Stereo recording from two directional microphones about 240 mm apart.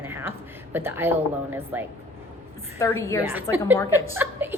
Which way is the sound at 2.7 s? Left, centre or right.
Centre.